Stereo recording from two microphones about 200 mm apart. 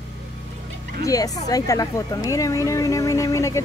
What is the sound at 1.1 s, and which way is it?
Speech, 15° left (ahead or behind).